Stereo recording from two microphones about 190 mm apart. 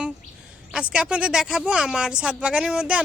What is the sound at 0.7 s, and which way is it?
Speech, 5° right (ahead or behind).